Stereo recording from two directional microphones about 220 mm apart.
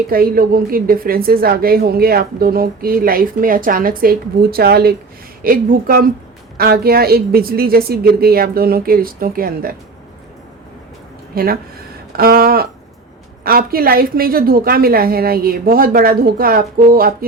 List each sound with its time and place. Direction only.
0.1 s a woman's voice: 40° right (ahead or behind)
11.3 s a woman's voice: 45° right (ahead or behind)